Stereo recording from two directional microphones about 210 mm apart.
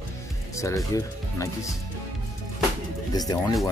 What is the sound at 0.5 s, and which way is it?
Speech, 15° left (ahead or behind).